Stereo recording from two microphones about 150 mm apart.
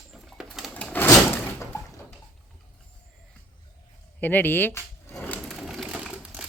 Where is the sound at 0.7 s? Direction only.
10° left (ahead or behind).